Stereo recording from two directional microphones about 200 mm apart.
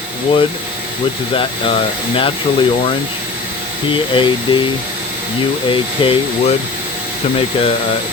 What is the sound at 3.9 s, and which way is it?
Speech, 25° left (ahead or behind).